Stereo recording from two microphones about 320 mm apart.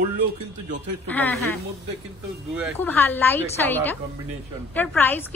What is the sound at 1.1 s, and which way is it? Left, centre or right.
Speech, centre.